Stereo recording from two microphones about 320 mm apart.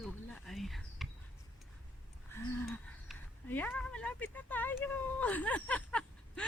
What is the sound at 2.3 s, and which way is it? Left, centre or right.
Speech, centre.